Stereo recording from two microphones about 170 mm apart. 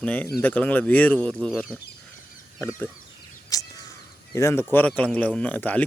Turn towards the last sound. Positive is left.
turn(degrees=10)  # may be behind; listen again after turning